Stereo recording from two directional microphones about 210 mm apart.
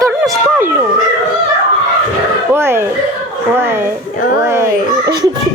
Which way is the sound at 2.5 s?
10° right (ahead or behind).